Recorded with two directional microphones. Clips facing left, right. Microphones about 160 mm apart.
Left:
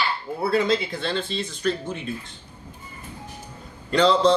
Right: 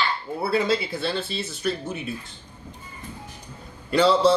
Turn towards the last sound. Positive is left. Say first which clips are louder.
# even
turn(degrees=-10)  # may be behind; listen again after turning